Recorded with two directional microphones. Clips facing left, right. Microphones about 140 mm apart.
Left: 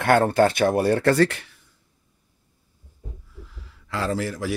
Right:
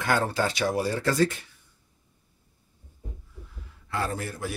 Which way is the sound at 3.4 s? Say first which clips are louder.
Left 2 dB; 90° left.